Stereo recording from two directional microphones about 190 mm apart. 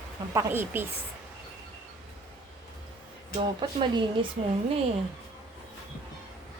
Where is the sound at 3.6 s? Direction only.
25° right (ahead or behind).